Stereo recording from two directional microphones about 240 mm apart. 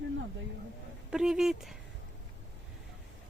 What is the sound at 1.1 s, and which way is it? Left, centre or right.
Speech, centre.